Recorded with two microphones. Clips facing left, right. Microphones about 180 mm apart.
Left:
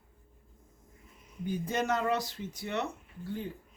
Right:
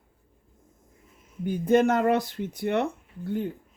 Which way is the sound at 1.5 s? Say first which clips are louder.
Right 10 dB; 55° right (ahead or behind).